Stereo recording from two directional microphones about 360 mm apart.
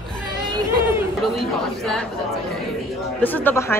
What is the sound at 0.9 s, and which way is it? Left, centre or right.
A man's voice, centre.